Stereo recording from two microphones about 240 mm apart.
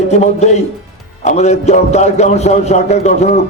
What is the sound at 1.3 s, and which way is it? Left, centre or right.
A man's voice, left.